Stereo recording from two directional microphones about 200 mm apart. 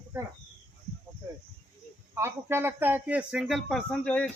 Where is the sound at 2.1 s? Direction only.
10° right (ahead or behind); by 4.3 s 5° left (ahead or behind).